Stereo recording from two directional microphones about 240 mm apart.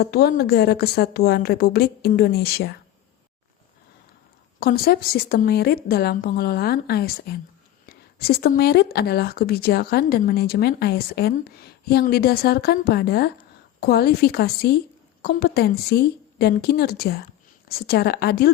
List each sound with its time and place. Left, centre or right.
0.0 s speech: left
4.6 s speech: left